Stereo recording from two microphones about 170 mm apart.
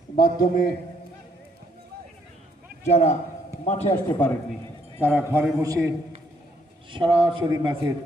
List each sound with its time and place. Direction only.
0.2 s a man's voice: 55° left (ahead or behind)
2.8 s a man's voice: 40° left (ahead or behind)
4.9 s a man's voice: 10° right (ahead or behind)
6.9 s a man's voice: 30° right (ahead or behind)